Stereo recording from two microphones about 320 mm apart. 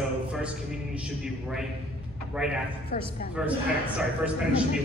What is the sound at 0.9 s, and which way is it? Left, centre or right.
A man's voice, centre.